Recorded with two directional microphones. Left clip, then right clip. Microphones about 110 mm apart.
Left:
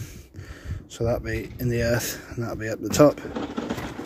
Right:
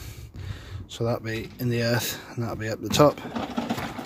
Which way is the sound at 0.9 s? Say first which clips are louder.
Left 2 dB; 15° right (ahead or behind).